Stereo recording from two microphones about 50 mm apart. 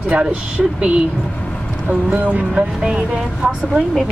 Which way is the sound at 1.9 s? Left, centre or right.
Right.